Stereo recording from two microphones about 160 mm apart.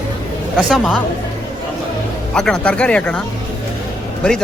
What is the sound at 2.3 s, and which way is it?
Speech, 5° left (ahead or behind).